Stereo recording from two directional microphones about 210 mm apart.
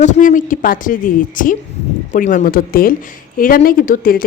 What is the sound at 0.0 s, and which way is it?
A woman's voice, 35° left (ahead or behind).